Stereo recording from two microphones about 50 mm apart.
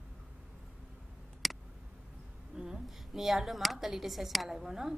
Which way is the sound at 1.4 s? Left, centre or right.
Centre.